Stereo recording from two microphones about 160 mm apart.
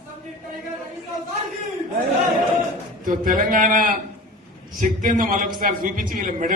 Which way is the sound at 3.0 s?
60° right (ahead or behind).